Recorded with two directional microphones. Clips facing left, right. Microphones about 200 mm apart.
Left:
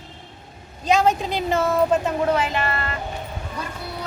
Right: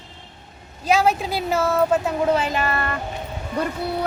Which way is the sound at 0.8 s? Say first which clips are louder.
Even; 5° right (ahead or behind).